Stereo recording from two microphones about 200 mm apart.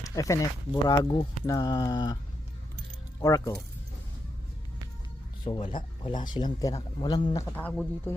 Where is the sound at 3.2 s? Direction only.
15° left (ahead or behind).